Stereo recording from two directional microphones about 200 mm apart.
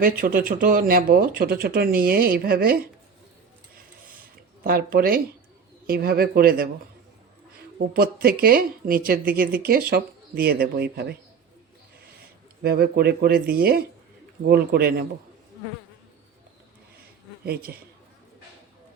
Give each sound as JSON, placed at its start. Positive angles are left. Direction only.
{"t": 0.0, "sound": "speech", "side_deg": -45}
{"t": 4.6, "sound": "speech", "side_deg": -45}
{"t": 7.9, "sound": "speech", "side_deg": -50}
{"t": 12.6, "sound": "speech", "side_deg": -50}
{"t": 17.4, "sound": "speech", "side_deg": -50}